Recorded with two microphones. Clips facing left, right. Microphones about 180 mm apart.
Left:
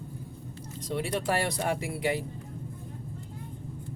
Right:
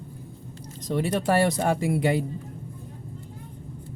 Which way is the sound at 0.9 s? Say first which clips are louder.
Right 6 dB; 45° right (ahead or behind).